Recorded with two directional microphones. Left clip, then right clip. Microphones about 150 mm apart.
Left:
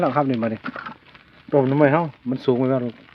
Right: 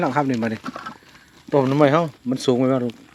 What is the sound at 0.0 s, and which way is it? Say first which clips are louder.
Speech: left 1 dB; centre (ahead or behind).